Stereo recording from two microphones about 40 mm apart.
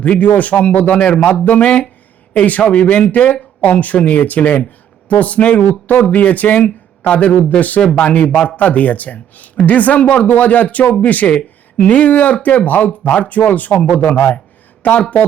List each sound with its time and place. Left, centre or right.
0.0 s speech: left
0.9 s speech: left